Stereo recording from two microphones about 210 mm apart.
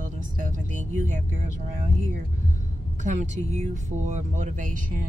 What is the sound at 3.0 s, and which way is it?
A woman's voice, 35° right (ahead or behind).